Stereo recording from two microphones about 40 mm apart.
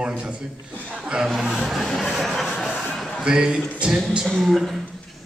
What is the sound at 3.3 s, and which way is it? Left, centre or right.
Speech, right.